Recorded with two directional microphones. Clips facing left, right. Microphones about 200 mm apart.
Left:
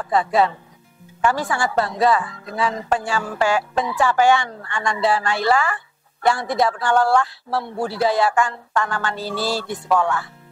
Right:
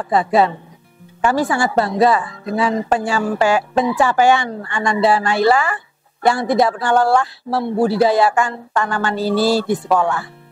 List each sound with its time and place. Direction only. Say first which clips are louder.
0.0 s a woman's voice: right 3 dB; 10° right (ahead or behind)
7.5 s speech: right 6 dB; 20° right (ahead or behind)
7.8 s a woman's voice: right 5 dB; 10° right (ahead or behind)
9.8 s speech: right 2 dB; 20° right (ahead or behind)